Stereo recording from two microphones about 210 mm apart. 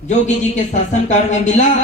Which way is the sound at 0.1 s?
35° left (ahead or behind).